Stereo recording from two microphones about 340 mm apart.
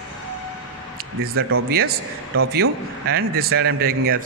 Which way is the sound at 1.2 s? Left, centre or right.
Right.